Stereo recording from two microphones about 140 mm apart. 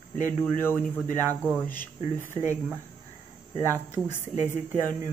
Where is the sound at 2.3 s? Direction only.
20° right (ahead or behind).